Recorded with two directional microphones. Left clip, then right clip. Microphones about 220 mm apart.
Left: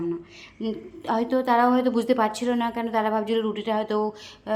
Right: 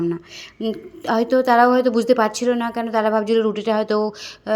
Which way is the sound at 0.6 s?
20° right (ahead or behind).